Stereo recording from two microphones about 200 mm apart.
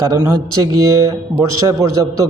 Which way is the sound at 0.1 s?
15° right (ahead or behind).